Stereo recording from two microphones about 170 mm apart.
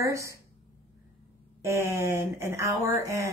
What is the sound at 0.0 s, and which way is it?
Speech, 20° right (ahead or behind).